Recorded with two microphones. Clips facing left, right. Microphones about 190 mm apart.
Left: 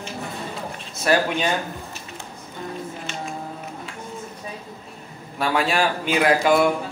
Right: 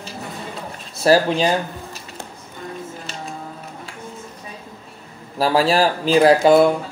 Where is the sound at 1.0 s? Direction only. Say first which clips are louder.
Right 5 dB; 35° right (ahead or behind).